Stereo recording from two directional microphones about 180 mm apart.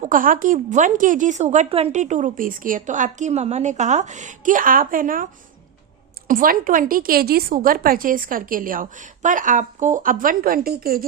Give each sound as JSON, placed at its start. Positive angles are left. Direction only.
{"t": 0.0, "sound": "a woman's voice", "side_deg": -50}